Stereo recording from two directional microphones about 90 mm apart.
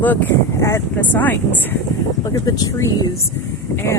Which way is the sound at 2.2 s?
40° left (ahead or behind).